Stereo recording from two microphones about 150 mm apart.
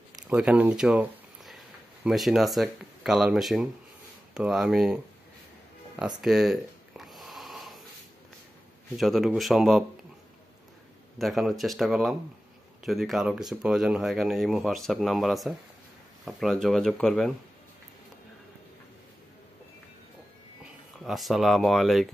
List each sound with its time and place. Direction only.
0.3 s speech: 5° right (ahead or behind)
5.9 s a sound: 5° right (ahead or behind)
8.9 s speech: centre (ahead or behind)
11.1 s speech: centre (ahead or behind)
21.0 s speech: centre (ahead or behind)